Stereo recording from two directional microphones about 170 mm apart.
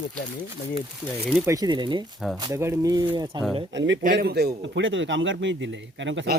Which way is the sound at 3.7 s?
90° right.